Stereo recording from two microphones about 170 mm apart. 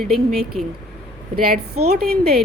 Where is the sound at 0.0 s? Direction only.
Centre (ahead or behind).